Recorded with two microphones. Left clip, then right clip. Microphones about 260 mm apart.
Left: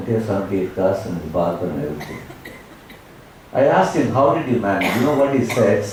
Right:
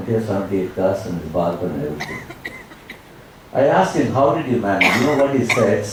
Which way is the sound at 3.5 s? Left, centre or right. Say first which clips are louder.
Even; centre.